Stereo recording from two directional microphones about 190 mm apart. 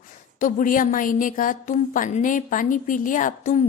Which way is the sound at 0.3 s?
45° left (ahead or behind).